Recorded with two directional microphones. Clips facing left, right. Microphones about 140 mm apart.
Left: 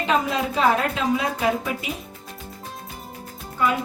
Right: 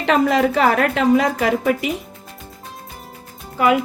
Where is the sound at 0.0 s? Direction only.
80° right.